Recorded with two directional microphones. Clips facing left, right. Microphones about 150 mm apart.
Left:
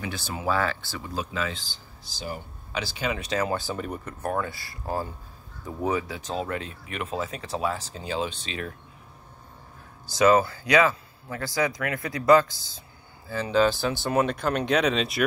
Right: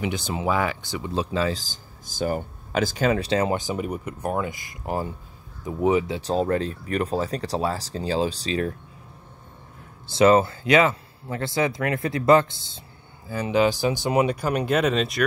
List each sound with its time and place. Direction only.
0.0 s speech: 20° right (ahead or behind)
1.2 s speech: 30° right (ahead or behind)
3.5 s speech: 15° right (ahead or behind)
6.3 s speech: 35° right (ahead or behind)
10.1 s speech: 25° right (ahead or behind); by 15.2 s centre (ahead or behind)